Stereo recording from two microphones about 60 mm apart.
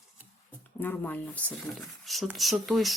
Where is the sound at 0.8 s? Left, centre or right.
Left.